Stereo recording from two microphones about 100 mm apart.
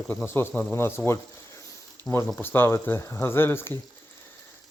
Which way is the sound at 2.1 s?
45° left (ahead or behind).